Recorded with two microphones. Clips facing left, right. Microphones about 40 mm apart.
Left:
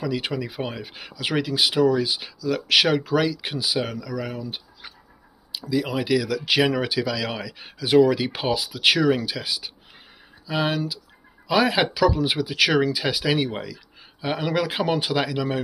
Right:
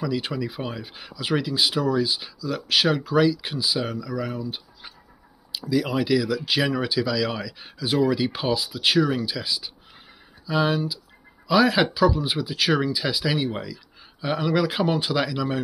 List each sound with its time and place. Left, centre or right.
0.0 s speech: left
0.8 s speech: left
5.7 s speech: centre
6.2 s speech: left
11.9 s speech: left
13.0 s speech: left